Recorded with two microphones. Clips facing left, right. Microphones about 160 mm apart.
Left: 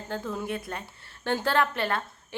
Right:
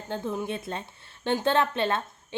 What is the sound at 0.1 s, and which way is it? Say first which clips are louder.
A woman's voice: right 2 dB; 20° right (ahead or behind).